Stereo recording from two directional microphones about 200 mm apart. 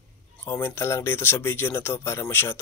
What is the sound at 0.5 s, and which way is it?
Speech, 10° left (ahead or behind).